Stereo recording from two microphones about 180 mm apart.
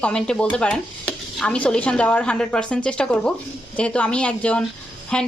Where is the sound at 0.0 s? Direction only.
5° left (ahead or behind).